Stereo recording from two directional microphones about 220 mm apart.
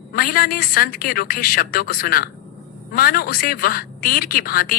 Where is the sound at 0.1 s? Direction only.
40° left (ahead or behind).